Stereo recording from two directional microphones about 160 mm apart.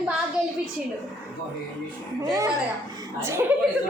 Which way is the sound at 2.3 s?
20° right (ahead or behind).